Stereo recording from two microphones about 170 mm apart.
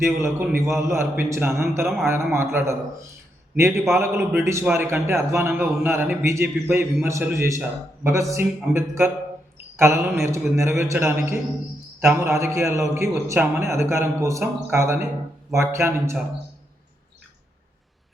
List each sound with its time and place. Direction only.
0.3 s a man's voice: 15° right (ahead or behind)